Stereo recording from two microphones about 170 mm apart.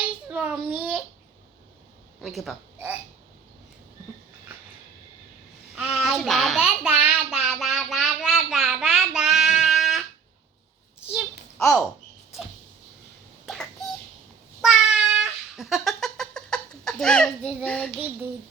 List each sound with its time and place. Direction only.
0.3 s a child's voice: 10° right (ahead or behind)
2.2 s speech: centre (ahead or behind)
5.7 s a sound: 5° right (ahead or behind)
11.1 s a sound: centre (ahead or behind)
13.4 s bird: centre (ahead or behind)
14.6 s cat: centre (ahead or behind)